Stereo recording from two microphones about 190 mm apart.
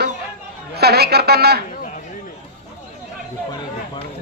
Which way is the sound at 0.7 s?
55° right (ahead or behind).